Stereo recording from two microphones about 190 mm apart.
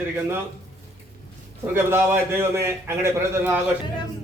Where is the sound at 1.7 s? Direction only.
10° right (ahead or behind).